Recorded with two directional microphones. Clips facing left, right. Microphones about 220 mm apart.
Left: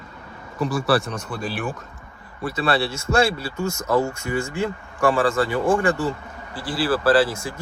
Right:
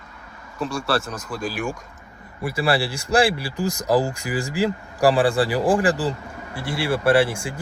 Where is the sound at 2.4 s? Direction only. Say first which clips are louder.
Even; 30° right (ahead or behind).